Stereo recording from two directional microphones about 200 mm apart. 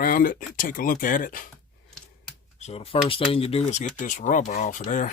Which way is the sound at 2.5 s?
30° left (ahead or behind).